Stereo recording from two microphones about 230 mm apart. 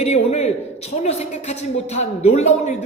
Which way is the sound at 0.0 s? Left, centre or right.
Left.